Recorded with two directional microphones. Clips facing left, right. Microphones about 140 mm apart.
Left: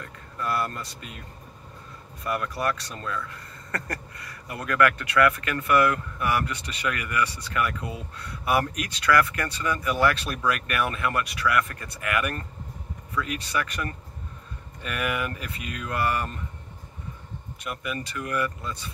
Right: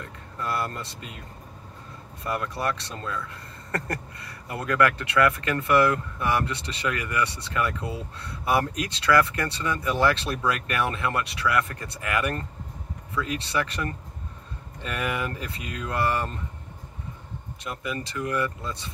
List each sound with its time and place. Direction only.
0.0 s speech: 25° right (ahead or behind)
2.2 s speech: 25° right (ahead or behind)
17.6 s speech: 25° right (ahead or behind)